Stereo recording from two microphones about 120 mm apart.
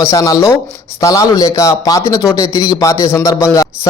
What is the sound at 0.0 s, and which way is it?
A man's voice, 25° left (ahead or behind).